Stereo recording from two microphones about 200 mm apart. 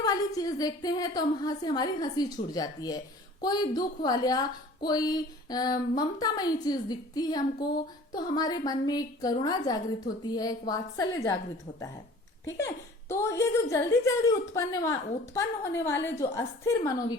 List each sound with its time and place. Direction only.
0.0 s a woman's voice: 15° left (ahead or behind)
12.5 s a woman's voice: 15° left (ahead or behind)